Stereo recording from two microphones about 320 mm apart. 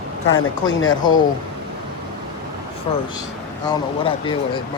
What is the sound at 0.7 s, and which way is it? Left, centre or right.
Speech, left.